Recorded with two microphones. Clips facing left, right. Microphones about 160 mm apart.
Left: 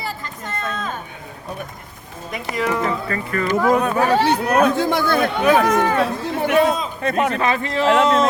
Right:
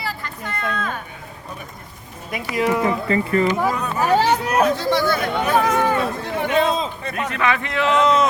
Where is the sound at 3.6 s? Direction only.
65° left (ahead or behind).